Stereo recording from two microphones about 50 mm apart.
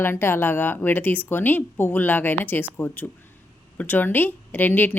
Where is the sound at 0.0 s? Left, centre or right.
Left.